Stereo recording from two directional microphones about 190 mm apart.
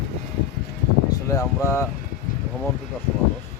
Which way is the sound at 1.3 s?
15° left (ahead or behind).